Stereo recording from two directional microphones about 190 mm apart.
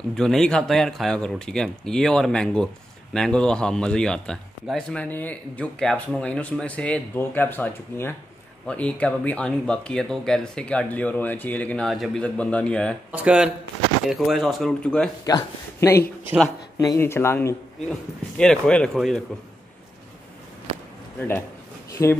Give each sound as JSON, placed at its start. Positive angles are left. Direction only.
{"t": 0.1, "sound": "speech", "side_deg": 0}
{"t": 13.1, "sound": "speech", "side_deg": -5}
{"t": 15.2, "sound": "speech", "side_deg": 20}
{"t": 21.2, "sound": "speech", "side_deg": 10}